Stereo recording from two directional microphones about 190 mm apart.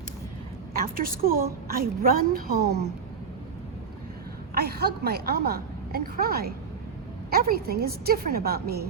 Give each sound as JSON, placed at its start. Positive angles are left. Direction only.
{"t": 0.8, "sound": "a woman's voice", "side_deg": -50}
{"t": 4.5, "sound": "a woman's voice", "side_deg": -55}